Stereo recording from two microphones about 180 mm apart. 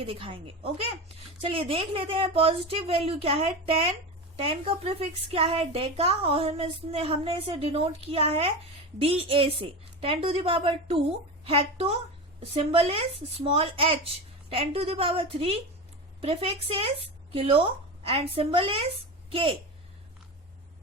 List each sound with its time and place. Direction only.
0.0 s a woman's voice: 30° right (ahead or behind)